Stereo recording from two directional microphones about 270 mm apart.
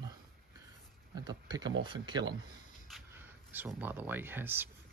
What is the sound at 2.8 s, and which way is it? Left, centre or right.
Speech, centre.